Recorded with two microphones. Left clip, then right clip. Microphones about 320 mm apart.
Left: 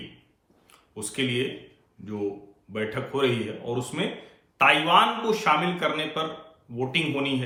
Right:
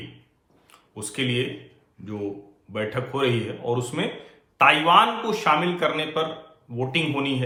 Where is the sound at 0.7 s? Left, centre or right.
Centre.